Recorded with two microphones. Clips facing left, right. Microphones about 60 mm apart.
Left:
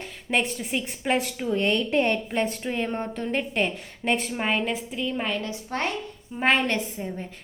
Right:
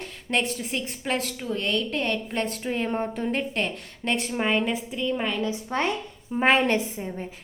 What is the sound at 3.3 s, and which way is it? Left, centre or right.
A woman's voice, centre.